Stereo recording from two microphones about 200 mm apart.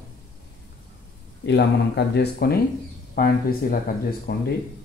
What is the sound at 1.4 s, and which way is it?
Speech, 55° left (ahead or behind).